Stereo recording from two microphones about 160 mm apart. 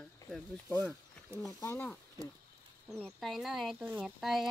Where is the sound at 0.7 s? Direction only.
15° left (ahead or behind).